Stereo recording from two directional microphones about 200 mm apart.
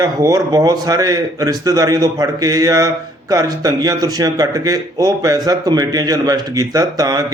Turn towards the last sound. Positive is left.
turn(degrees=-15)  # may be behind; listen again after turning